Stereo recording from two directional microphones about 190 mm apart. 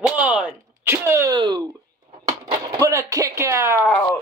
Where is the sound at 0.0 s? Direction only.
5° right (ahead or behind); by 1.7 s 25° right (ahead or behind).